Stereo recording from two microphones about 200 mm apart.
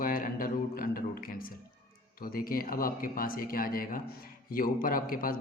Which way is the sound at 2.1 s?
45° left (ahead or behind).